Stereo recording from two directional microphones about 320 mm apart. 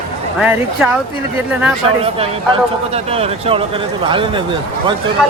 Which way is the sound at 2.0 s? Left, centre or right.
Centre.